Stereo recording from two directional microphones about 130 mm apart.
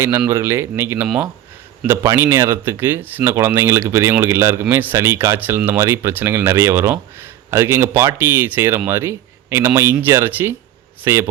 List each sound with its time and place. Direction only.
0.3 s speech: 20° right (ahead or behind)
2.0 s speech: 20° right (ahead or behind)